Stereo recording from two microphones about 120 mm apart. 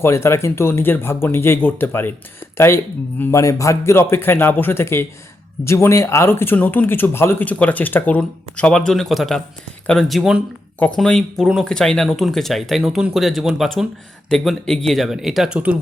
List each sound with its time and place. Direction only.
0.0 s a man's voice: 20° left (ahead or behind); by 10.4 s centre (ahead or behind)
10.8 s speech: 10° left (ahead or behind); by 15.7 s 10° right (ahead or behind)